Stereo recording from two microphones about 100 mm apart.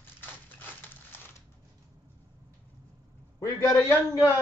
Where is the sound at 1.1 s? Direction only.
20° left (ahead or behind).